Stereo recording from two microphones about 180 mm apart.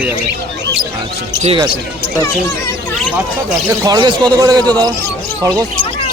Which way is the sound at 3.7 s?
20° right (ahead or behind).